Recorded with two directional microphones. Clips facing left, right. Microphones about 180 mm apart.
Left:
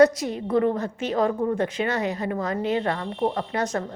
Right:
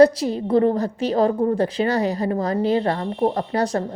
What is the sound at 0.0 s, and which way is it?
Speech, 35° right (ahead or behind).